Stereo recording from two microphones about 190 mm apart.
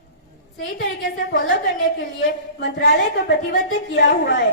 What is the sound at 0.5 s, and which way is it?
A woman's voice, 65° left (ahead or behind).